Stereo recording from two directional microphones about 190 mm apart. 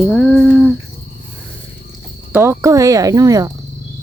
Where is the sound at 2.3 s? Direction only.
15° right (ahead or behind).